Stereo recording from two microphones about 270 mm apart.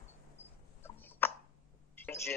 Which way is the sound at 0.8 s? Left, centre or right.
Centre.